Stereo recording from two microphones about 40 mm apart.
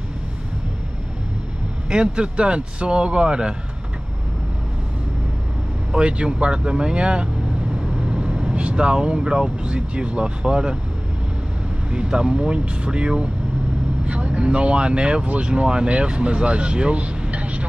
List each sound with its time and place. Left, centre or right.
1.9 s speech: right
5.9 s speech: right
11.9 s speech: right